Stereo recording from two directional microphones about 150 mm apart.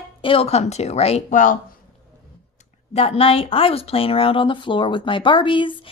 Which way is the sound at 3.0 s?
40° left (ahead or behind).